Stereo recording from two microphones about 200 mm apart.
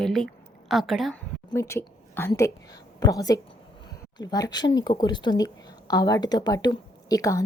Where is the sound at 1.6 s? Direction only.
15° left (ahead or behind).